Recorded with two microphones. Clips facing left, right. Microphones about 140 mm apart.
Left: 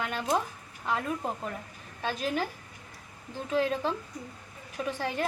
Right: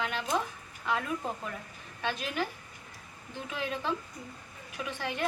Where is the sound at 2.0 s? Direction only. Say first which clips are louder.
Left 3 dB; 40° left (ahead or behind).